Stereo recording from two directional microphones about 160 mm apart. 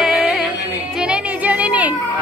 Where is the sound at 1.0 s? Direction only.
5° right (ahead or behind).